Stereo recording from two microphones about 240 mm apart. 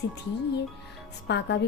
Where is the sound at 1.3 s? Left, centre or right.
Left.